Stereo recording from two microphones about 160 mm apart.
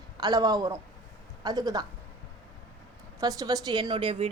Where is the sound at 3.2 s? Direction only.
25° right (ahead or behind).